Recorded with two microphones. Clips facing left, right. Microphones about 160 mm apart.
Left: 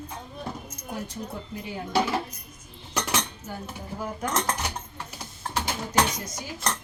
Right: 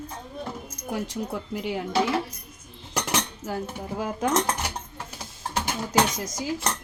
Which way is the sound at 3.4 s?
90° right.